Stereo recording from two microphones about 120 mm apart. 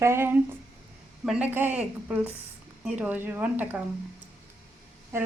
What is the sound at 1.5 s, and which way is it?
A woman's voice, 15° right (ahead or behind).